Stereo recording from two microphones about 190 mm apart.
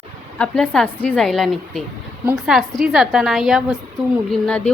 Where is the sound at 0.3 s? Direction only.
5° left (ahead or behind).